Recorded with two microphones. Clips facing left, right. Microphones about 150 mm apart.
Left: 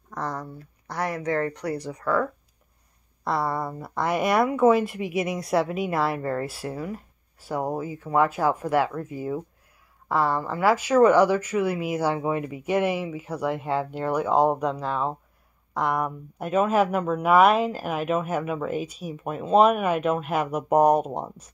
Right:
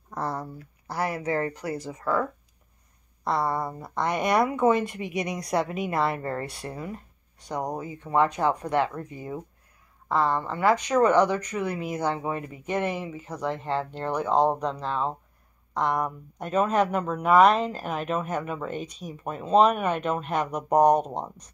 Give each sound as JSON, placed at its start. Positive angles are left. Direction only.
{"t": 0.2, "sound": "a sound", "side_deg": -30}
{"t": 0.8, "sound": "speech", "side_deg": -5}
{"t": 3.3, "sound": "speech", "side_deg": 0}